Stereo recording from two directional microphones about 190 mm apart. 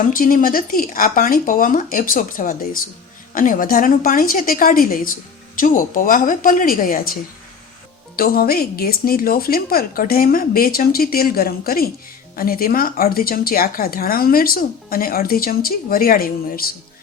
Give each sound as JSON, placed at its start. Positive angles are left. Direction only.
{"t": 0.1, "sound": "speech", "side_deg": 45}
{"t": 8.1, "sound": "speech", "side_deg": 50}